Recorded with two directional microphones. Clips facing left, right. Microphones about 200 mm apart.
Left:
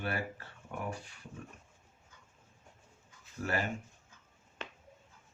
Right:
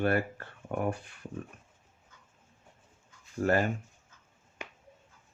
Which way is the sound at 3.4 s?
50° right (ahead or behind).